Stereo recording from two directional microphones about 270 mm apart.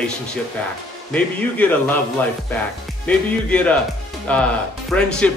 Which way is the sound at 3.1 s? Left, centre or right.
Centre.